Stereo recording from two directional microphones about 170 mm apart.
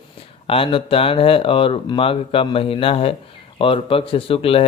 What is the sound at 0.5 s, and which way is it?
Speech, 35° left (ahead or behind).